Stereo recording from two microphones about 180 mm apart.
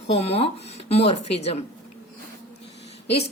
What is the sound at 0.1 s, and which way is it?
Speech, 35° left (ahead or behind).